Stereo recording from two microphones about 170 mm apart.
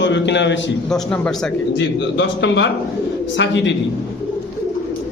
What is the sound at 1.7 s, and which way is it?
A man's voice, 90° left.